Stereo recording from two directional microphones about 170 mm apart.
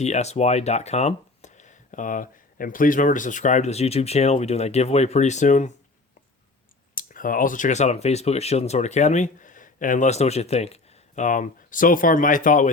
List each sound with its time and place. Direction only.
0.0 s speech: 40° left (ahead or behind)
6.9 s speech: 55° left (ahead or behind)